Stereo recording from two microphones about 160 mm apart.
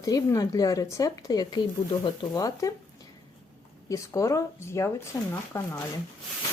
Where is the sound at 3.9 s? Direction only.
20° left (ahead or behind).